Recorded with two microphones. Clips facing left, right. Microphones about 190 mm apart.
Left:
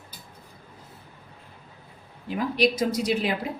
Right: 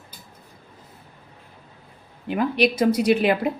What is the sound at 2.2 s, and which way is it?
A woman's voice, 60° right (ahead or behind).